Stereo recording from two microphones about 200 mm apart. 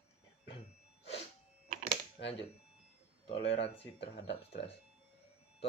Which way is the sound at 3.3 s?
30° left (ahead or behind).